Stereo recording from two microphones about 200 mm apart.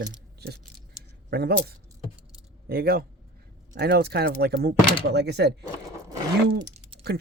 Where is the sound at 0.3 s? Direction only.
55° right (ahead or behind).